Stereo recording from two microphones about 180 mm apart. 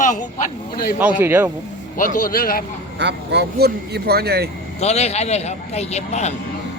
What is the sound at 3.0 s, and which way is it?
Speech, 70° right (ahead or behind).